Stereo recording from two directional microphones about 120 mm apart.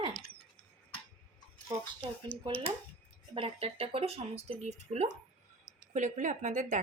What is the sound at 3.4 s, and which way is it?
Speech, 55° right (ahead or behind).